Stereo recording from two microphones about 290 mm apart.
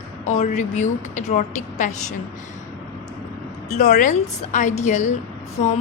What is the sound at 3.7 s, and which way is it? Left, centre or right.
A woman's voice, left.